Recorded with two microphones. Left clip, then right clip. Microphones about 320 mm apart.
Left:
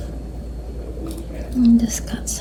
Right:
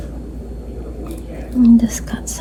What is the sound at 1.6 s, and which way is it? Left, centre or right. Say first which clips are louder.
Speech: right 4 dB; right.